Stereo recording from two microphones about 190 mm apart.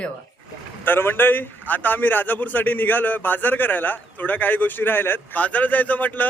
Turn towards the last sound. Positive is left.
turn(degrees=10)  # may be behind; listen again after turning